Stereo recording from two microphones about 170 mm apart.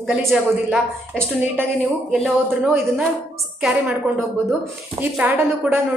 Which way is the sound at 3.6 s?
5° right (ahead or behind).